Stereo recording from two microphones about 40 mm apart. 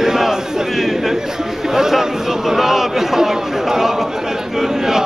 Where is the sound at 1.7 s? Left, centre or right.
Centre.